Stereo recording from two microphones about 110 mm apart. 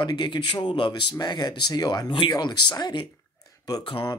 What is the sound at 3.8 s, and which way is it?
Speech, 55° left (ahead or behind).